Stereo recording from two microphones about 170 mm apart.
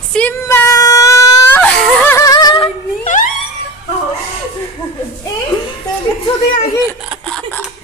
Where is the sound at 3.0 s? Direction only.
50° left (ahead or behind).